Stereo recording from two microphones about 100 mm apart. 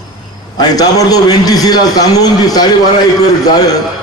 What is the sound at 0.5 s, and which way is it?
A man's voice, 40° left (ahead or behind).